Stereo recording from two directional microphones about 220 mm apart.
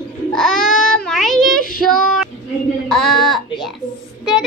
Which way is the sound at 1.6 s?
40° left (ahead or behind).